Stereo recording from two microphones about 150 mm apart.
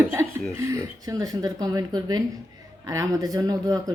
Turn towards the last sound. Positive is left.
turn(degrees=-25)  # may be behind; listen again after turning